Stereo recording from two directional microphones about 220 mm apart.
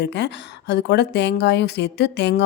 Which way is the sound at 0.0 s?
50° left (ahead or behind).